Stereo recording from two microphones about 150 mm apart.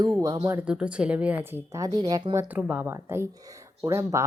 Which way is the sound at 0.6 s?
5° right (ahead or behind).